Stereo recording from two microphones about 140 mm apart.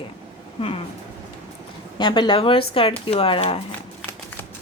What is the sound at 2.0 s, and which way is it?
Speech, 35° left (ahead or behind).